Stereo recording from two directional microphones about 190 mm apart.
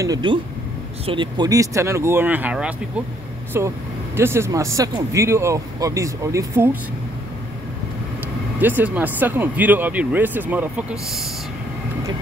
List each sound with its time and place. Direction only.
0.0 s speech: 20° right (ahead or behind)
8.5 s speech: 10° right (ahead or behind)